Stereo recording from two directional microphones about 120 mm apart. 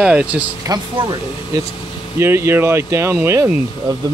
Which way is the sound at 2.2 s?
20° right (ahead or behind).